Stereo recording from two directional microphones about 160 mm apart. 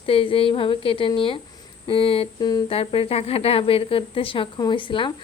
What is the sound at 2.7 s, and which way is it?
Speech, 35° left (ahead or behind).